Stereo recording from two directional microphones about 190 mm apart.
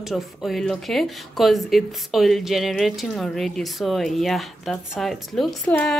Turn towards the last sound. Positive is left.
turn(degrees=5)  # may be behind; listen again after turning